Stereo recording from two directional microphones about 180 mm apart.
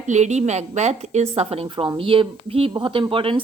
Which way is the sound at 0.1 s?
40° right (ahead or behind).